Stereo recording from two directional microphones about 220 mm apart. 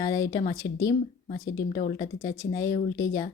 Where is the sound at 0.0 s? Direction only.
15° left (ahead or behind).